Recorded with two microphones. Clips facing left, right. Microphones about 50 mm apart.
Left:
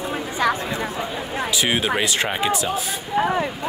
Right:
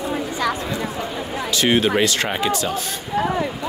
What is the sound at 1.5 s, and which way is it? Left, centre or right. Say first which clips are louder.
Speech: right 5 dB; centre.